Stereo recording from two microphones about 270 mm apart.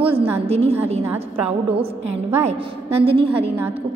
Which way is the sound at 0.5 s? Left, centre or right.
Right.